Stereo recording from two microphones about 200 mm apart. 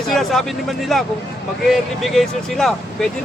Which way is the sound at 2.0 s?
Centre (ahead or behind).